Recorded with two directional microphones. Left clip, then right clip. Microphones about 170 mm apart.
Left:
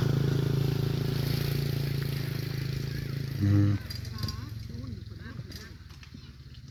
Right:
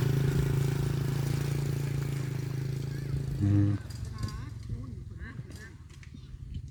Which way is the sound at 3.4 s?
20° right (ahead or behind).